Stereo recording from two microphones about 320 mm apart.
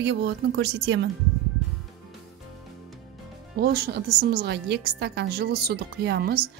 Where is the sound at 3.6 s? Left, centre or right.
Right.